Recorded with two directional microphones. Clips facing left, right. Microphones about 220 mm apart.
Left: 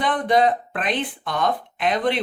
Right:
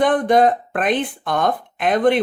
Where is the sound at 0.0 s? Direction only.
50° right (ahead or behind).